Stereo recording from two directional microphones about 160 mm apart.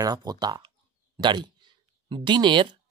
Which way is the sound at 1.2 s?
30° right (ahead or behind).